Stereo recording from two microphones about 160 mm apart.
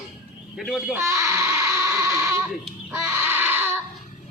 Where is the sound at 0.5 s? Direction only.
Centre (ahead or behind).